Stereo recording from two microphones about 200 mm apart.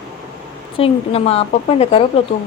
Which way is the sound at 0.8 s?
30° left (ahead or behind).